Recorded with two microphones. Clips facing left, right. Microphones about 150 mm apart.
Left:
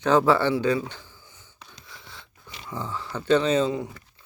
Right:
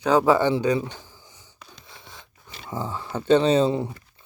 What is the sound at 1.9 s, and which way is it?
Wheeze, 20° right (ahead or behind).